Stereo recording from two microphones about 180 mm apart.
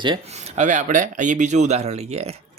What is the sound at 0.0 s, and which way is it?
Speech, 25° right (ahead or behind).